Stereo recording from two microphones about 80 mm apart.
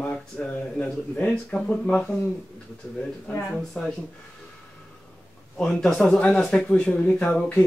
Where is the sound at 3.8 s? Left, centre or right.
Centre.